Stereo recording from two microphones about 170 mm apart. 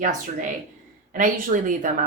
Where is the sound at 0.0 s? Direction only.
50° right (ahead or behind).